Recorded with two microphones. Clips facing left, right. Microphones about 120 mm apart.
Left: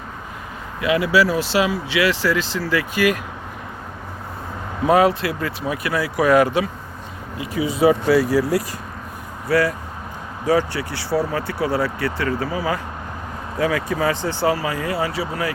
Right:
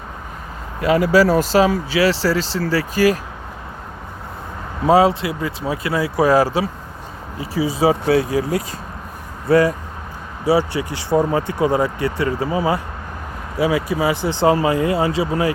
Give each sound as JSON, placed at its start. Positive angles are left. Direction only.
{"t": 0.8, "sound": "speech", "side_deg": -40}
{"t": 4.9, "sound": "speech", "side_deg": -25}
{"t": 8.2, "sound": "speech", "side_deg": -20}
{"t": 13.6, "sound": "speech", "side_deg": -10}